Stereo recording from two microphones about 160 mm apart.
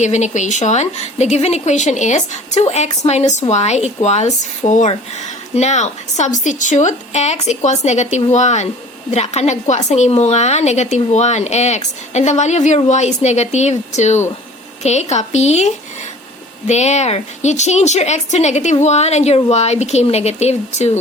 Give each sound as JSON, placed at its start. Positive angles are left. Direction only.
{"t": 0.0, "sound": "a woman's voice", "side_deg": 45}